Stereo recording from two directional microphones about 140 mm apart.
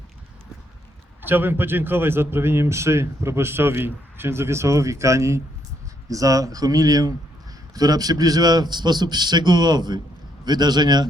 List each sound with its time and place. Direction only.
1.2 s a man's voice: 15° right (ahead or behind); by 11.1 s 30° right (ahead or behind)